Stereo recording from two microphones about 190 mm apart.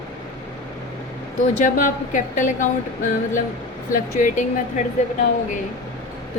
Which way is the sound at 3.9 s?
40° left (ahead or behind).